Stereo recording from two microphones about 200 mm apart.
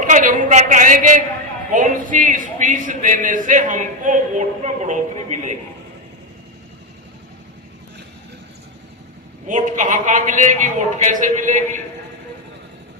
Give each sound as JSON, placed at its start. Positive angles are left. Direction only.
{"t": 0.0, "sound": "a man's voice", "side_deg": -40}
{"t": 9.5, "sound": "a man's voice", "side_deg": -40}